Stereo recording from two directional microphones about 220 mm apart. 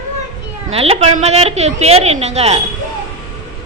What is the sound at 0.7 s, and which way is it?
A woman's voice, 25° right (ahead or behind).